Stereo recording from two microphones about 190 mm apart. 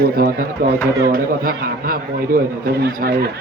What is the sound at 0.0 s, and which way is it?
Speech, 50° right (ahead or behind).